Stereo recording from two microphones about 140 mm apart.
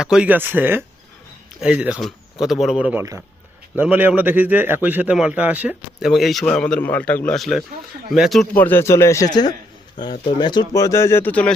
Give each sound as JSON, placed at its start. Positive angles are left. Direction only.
{"t": 0.0, "sound": "a man's voice", "side_deg": -5}
{"t": 3.0, "sound": "a man's voice", "side_deg": -20}
{"t": 6.1, "sound": "speech", "side_deg": 0}
{"t": 8.5, "sound": "speech", "side_deg": 15}